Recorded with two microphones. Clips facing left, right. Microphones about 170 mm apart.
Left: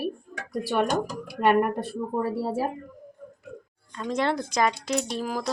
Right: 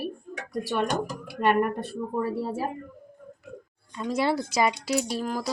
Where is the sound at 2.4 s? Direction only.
35° left (ahead or behind).